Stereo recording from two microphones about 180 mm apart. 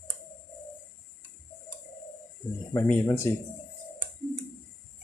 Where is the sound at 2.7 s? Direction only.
15° left (ahead or behind).